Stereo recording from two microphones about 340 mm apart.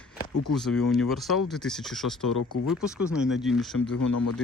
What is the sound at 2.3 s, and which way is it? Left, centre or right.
Speech, left.